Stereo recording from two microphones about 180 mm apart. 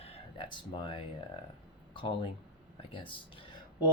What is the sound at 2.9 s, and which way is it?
Speech, 30° left (ahead or behind).